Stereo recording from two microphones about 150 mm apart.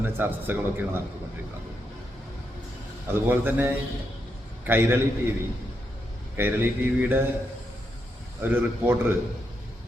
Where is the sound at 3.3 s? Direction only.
15° right (ahead or behind).